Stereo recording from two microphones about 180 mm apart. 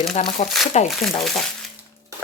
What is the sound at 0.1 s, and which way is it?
Speech, 40° left (ahead or behind).